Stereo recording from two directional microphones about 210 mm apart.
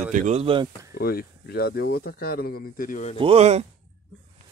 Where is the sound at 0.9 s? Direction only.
45° left (ahead or behind).